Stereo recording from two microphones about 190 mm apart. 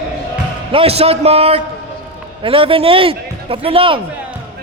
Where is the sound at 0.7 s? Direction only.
30° right (ahead or behind).